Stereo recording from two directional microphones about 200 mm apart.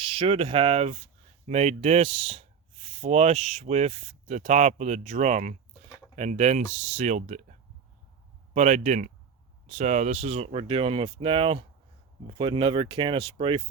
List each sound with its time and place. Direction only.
0.0 s speech: 25° right (ahead or behind)
8.5 s speech: 40° right (ahead or behind)